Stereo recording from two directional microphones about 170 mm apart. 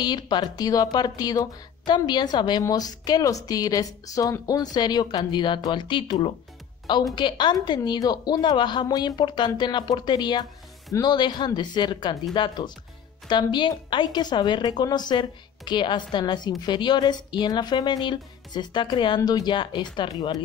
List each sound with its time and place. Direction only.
0.0 s a woman's voice: 25° left (ahead or behind)